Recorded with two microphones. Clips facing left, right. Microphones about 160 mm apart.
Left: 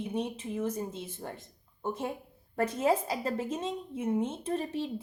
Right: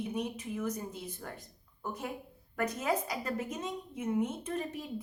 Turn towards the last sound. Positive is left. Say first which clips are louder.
# left 5 dB
turn(degrees=30)  # may be behind; listen again after turning